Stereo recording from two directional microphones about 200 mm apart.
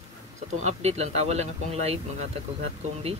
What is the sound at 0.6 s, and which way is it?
Speech, 35° right (ahead or behind).